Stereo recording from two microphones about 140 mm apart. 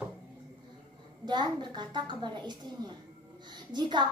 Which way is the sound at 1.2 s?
30° right (ahead or behind).